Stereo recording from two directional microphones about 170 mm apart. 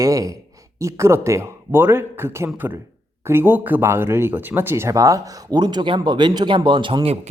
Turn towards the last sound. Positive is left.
turn(degrees=-35)  # may be behind; listen again after turning